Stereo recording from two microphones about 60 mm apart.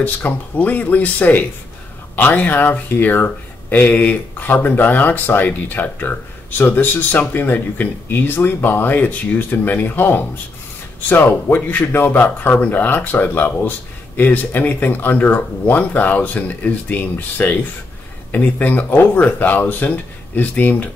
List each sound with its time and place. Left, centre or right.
0.0 s speech: left
11.4 s speech: left